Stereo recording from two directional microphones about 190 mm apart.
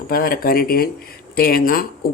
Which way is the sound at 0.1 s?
50° left (ahead or behind).